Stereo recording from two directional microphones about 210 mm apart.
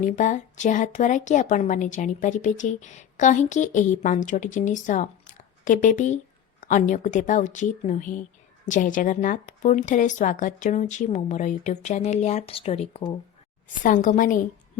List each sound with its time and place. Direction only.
0.0 s a woman's voice: 35° left (ahead or behind)
13.8 s a woman's voice: 40° left (ahead or behind)